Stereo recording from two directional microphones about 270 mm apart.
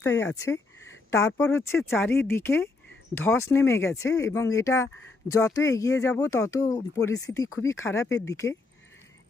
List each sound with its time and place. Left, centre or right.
0.1 s speech: left
1.1 s speech: centre